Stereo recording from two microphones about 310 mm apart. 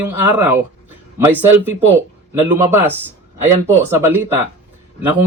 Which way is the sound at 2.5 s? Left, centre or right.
Centre.